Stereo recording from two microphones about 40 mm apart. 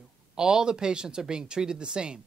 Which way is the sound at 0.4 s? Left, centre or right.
Centre.